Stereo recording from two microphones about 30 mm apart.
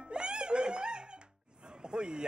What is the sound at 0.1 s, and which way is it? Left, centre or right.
Music, right.